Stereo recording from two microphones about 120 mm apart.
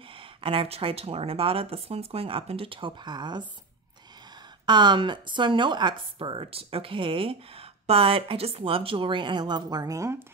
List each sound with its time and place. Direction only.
0.4 s speech: 50° right (ahead or behind)
4.6 s speech: 40° right (ahead or behind)